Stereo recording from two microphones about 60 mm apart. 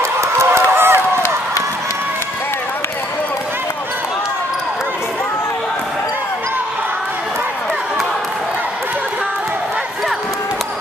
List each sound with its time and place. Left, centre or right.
0.0 s run: right